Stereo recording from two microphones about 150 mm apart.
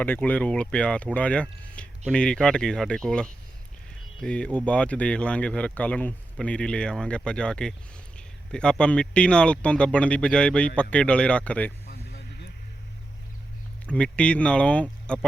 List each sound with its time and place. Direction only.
0.0 s speech: 10° left (ahead or behind)
11.9 s vehicle: 90° left
13.9 s speech: 5° left (ahead or behind)